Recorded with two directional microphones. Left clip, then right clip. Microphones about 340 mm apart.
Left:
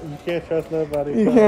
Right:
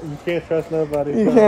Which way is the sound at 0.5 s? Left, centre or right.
Centre.